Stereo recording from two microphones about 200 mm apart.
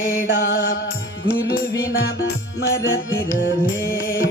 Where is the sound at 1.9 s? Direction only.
55° left (ahead or behind).